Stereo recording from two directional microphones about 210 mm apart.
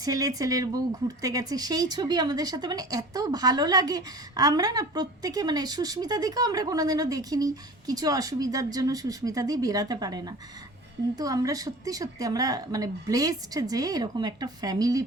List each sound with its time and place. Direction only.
0.0 s speech: 15° right (ahead or behind)